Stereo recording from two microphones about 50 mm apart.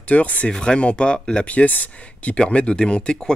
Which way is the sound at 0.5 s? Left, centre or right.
Centre.